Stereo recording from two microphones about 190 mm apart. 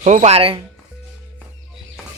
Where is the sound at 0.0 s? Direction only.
40° right (ahead or behind).